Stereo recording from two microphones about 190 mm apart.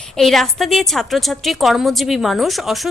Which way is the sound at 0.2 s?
Centre (ahead or behind).